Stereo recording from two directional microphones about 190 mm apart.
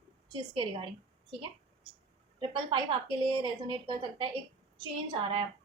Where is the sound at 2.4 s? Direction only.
25° right (ahead or behind).